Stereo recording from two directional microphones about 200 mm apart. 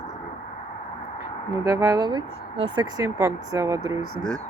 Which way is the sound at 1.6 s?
15° right (ahead or behind).